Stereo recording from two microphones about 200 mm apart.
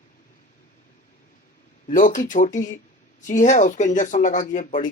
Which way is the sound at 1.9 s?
40° left (ahead or behind).